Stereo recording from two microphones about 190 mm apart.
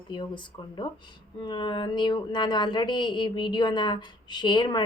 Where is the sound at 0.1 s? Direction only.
25° left (ahead or behind).